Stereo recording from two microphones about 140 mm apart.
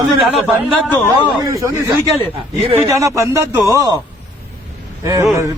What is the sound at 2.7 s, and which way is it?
A man's voice, 20° right (ahead or behind).